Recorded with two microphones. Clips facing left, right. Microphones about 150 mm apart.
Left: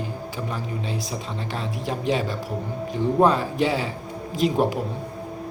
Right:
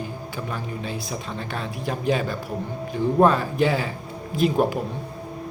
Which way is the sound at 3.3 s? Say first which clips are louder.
Right 1 dB; 25° left (ahead or behind).